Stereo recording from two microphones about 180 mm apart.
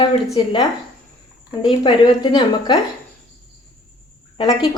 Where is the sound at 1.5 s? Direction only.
25° left (ahead or behind).